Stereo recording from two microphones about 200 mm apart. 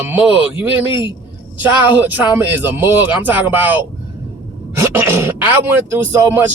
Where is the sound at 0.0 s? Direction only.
10° right (ahead or behind).